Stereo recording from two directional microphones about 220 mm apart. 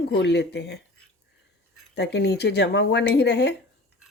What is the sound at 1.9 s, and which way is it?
Speech, 50° left (ahead or behind).